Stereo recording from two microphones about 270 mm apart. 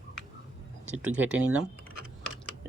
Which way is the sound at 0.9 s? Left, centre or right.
Centre.